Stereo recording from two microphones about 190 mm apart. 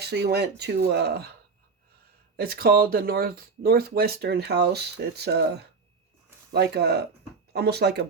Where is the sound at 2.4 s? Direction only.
55° right (ahead or behind).